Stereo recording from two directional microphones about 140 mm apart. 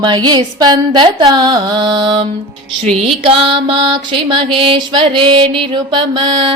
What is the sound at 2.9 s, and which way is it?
Music, 45° right (ahead or behind).